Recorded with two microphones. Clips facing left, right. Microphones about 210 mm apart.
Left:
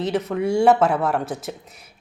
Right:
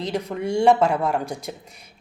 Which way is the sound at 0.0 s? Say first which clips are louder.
Left 4 dB; 5° left (ahead or behind).